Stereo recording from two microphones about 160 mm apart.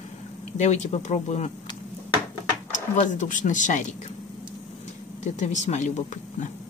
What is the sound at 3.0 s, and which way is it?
Speech, 50° left (ahead or behind).